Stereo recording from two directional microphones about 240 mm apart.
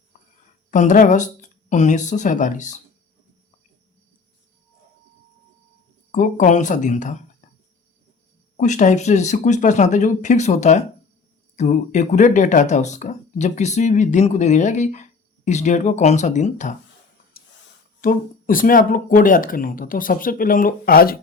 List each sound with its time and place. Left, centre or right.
0.7 s speech: left
6.1 s speech: left
8.5 s speech: left
17.4 s a sound: left
18.0 s speech: left